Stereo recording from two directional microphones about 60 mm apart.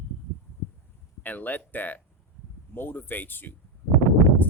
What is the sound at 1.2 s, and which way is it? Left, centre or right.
Speech, left.